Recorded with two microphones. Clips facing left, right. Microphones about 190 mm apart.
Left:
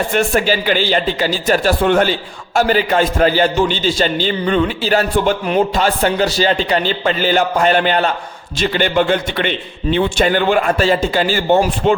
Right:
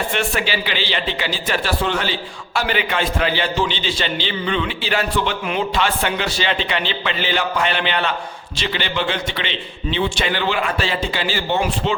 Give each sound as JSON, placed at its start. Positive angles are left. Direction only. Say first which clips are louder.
{"t": 0.1, "sound": "a man's voice", "louder": "left 7 dB", "side_deg": 45}